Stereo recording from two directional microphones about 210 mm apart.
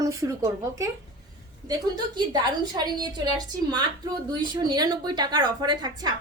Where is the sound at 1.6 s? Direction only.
20° right (ahead or behind).